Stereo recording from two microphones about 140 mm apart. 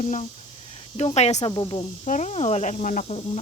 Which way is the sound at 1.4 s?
30° left (ahead or behind).